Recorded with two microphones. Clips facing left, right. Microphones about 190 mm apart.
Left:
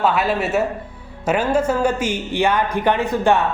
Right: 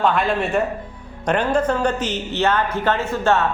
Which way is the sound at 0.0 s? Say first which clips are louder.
Even; 5° left (ahead or behind).